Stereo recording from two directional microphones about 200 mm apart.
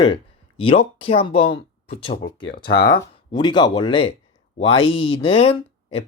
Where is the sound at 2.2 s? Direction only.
60° left (ahead or behind).